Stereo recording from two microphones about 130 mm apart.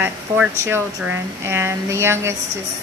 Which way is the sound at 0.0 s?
15° right (ahead or behind).